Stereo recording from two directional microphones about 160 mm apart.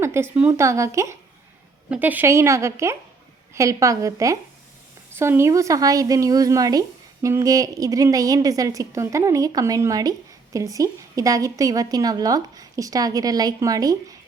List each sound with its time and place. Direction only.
0.0 s a woman's voice: 15° right (ahead or behind)